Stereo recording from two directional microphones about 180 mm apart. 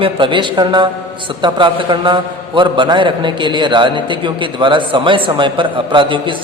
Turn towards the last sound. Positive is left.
turn(degrees=-25)  # may be behind; listen again after turning